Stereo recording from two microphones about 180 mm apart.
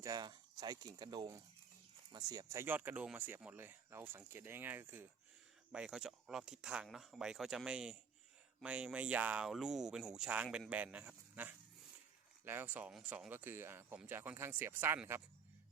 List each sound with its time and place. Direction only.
0.0 s speech: 20° right (ahead or behind)